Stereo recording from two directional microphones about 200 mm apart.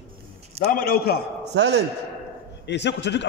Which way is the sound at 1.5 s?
55° right (ahead or behind).